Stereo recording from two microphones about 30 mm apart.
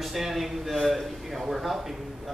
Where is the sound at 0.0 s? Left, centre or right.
Centre.